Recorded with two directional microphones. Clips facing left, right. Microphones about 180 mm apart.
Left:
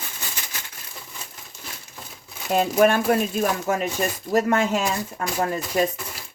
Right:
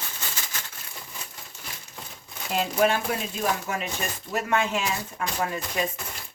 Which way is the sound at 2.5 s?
50° left (ahead or behind).